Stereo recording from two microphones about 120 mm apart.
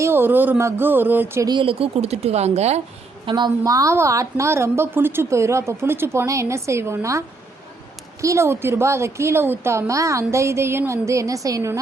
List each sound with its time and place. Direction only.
0.0 s speech: 20° right (ahead or behind)
1.5 s speech: 45° right (ahead or behind); by 2.8 s 65° right (ahead or behind)
3.2 s a woman's voice: 40° right (ahead or behind)